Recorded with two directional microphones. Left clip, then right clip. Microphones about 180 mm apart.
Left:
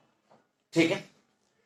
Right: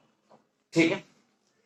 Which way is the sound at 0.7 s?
20° left (ahead or behind).